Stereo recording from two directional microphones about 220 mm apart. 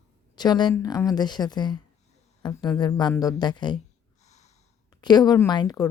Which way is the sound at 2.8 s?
20° left (ahead or behind).